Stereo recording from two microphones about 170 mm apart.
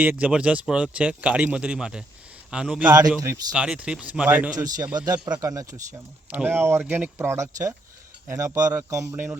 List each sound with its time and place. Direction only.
0.0 s a man's voice: 10° right (ahead or behind)
3.2 s speech: 20° right (ahead or behind)
3.5 s speech: 5° right (ahead or behind)
4.5 s speech: 20° right (ahead or behind)